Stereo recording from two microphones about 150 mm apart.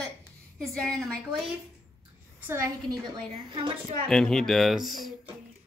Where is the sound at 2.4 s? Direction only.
15° right (ahead or behind).